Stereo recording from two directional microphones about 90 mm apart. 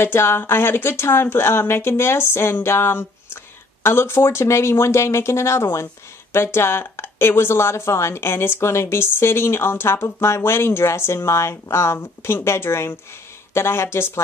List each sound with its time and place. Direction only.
0.0 s speech: 30° left (ahead or behind)